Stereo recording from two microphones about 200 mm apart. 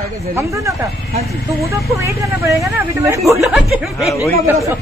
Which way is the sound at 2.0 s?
15° right (ahead or behind).